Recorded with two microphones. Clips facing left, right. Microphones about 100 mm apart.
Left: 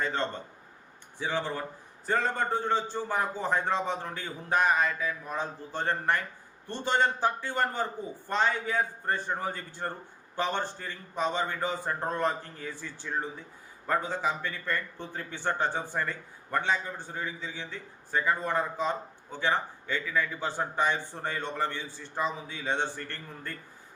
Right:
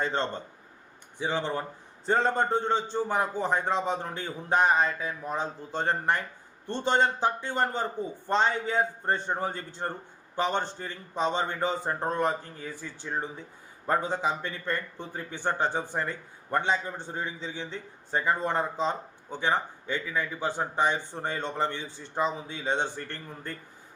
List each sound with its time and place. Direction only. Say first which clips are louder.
0.0 s a man's voice: right 2 dB; 30° right (ahead or behind)